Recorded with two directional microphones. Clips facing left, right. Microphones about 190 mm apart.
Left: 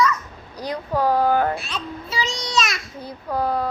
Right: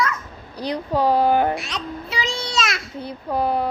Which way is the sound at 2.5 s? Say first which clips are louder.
Left 3 dB; 25° right (ahead or behind).